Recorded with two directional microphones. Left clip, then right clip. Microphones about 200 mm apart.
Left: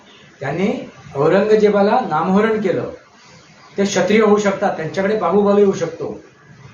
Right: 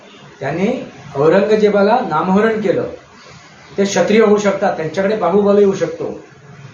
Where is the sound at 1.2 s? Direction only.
5° right (ahead or behind).